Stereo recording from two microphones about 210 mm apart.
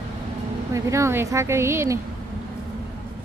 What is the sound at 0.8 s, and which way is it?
Speech, 15° right (ahead or behind).